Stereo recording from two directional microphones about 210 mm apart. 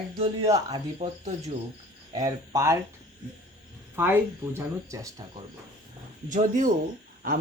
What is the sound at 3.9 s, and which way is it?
Speech, 10° right (ahead or behind).